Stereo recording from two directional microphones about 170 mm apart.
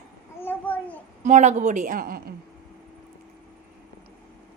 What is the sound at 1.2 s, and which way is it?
A woman's voice, 45° right (ahead or behind).